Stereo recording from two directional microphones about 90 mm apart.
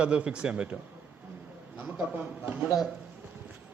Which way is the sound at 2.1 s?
20° right (ahead or behind).